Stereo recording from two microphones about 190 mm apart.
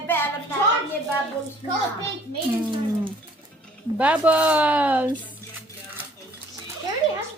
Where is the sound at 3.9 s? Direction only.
5° right (ahead or behind).